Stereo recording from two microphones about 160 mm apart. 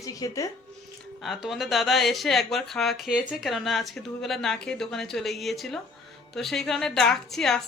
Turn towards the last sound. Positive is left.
turn(degrees=5)  # may be behind; listen again after turning